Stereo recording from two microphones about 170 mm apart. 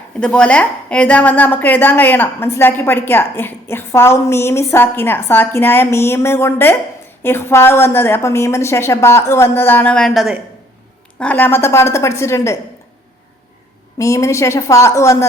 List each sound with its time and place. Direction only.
0.2 s a woman's voice: 5° left (ahead or behind)
14.0 s a woman's voice: 15° left (ahead or behind)